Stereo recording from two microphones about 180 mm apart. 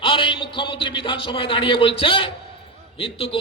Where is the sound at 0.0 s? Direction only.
30° left (ahead or behind).